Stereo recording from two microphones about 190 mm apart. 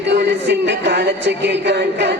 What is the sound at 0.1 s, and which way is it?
Music, 65° right (ahead or behind).